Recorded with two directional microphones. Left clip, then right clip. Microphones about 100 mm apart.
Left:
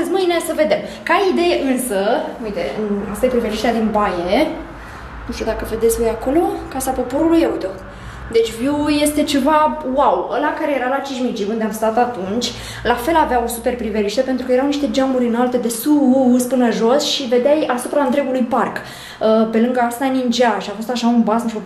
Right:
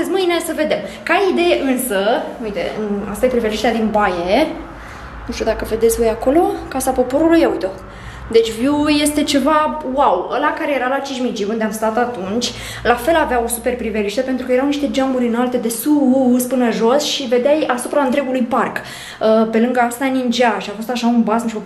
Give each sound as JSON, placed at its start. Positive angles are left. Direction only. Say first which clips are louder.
{"t": 0.2, "sound": "a woman's voice", "louder": "left 1 dB", "side_deg": -5}
{"t": 17.3, "sound": "a woman's voice", "louder": "even", "side_deg": -10}